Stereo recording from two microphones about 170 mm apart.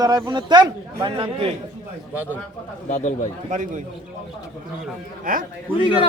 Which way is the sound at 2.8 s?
45° left (ahead or behind).